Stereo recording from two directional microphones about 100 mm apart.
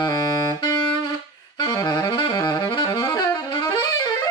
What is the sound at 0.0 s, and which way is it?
Saxophone, 45° left (ahead or behind).